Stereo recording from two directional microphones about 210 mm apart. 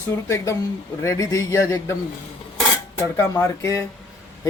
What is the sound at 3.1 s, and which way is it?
Speech, 10° left (ahead or behind).